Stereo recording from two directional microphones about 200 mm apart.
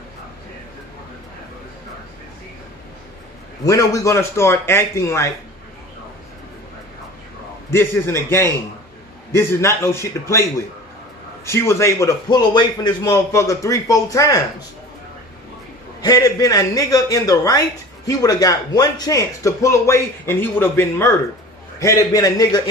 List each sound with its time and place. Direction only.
3.6 s a man's voice: 15° left (ahead or behind)
7.7 s a man's voice: 10° left (ahead or behind)
11.4 s a man's voice: 15° left (ahead or behind)
16.0 s a man's voice: 20° left (ahead or behind)